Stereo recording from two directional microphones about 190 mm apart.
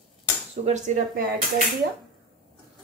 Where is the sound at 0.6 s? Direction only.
40° right (ahead or behind).